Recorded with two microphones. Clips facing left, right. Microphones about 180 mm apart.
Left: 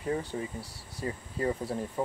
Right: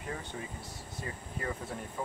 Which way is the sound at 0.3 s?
30° left (ahead or behind).